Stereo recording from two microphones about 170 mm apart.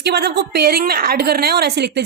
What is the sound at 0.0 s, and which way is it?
A woman's voice, 75° right (ahead or behind).